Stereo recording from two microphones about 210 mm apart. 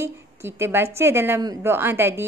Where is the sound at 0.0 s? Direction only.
10° right (ahead or behind).